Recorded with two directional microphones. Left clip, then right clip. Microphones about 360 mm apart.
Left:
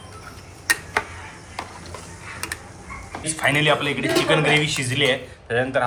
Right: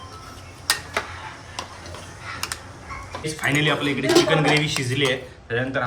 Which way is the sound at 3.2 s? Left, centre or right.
Centre.